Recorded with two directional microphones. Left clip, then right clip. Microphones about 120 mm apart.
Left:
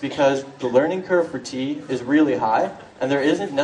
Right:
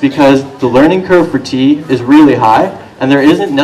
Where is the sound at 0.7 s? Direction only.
50° left (ahead or behind).